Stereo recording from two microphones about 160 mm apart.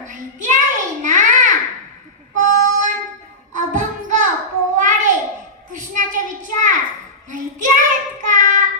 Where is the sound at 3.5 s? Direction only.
55° right (ahead or behind).